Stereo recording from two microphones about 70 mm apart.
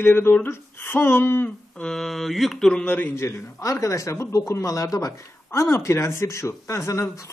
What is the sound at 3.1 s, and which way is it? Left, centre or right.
Speech, left.